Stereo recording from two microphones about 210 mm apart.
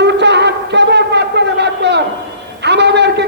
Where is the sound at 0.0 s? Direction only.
55° right (ahead or behind).